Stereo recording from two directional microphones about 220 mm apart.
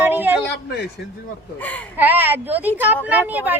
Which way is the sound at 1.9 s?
10° right (ahead or behind).